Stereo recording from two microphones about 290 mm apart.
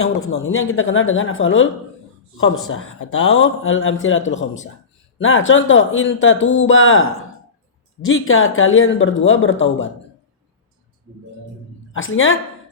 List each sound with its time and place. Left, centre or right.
0.0 s speech: left
8.0 s speech: left
11.9 s a woman's voice: left